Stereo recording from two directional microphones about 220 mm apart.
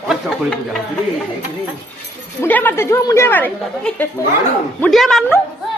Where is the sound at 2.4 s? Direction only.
10° left (ahead or behind).